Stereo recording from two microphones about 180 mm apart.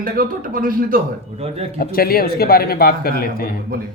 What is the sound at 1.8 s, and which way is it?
Speech, 55° left (ahead or behind).